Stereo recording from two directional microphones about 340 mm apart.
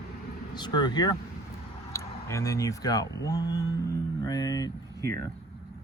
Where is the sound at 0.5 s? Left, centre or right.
Centre.